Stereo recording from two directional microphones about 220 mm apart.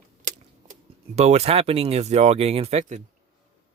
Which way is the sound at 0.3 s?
30° right (ahead or behind).